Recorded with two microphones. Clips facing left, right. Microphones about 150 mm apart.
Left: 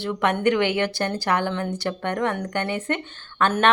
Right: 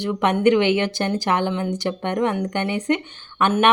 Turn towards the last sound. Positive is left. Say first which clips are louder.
# right 2 dB
turn(degrees=-15)  # may be behind; listen again after turning